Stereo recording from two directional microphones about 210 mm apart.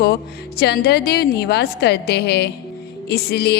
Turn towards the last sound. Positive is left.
turn(degrees=50)  # may be behind; listen again after turning